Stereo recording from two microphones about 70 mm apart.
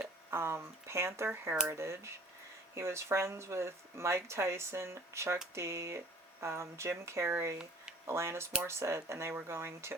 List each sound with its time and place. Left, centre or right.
0.3 s speech: right